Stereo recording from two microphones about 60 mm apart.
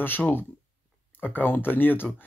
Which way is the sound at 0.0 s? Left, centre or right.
Left.